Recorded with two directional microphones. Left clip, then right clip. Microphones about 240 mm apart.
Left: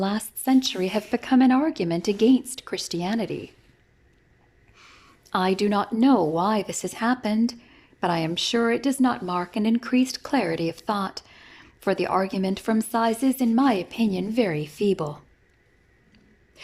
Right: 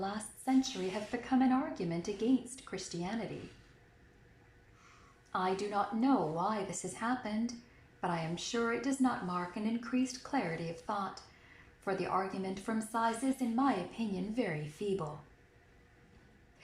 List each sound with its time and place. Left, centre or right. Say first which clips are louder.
0.0 s speech: left 11 dB; left
4.8 s a woman's voice: left 11 dB; left